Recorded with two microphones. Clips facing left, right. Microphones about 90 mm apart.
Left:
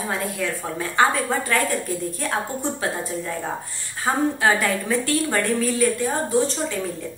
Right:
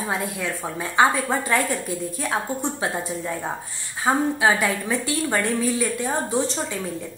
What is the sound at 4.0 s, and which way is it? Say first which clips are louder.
A woman's voice: right 1 dB; 10° right (ahead or behind).